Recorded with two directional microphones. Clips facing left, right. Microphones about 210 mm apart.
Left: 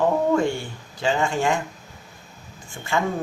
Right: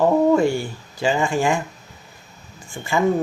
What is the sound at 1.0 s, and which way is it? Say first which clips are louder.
Speech: right 2 dB; 5° right (ahead or behind).